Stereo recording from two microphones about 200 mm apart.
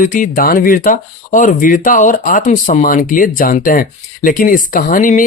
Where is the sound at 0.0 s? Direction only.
45° left (ahead or behind).